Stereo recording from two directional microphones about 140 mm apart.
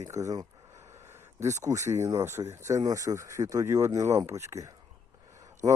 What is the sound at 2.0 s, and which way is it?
Speech, 20° right (ahead or behind).